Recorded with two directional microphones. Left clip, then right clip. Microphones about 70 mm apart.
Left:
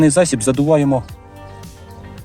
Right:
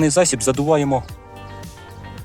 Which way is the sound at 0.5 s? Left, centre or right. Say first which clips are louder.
Left 4 dB; right.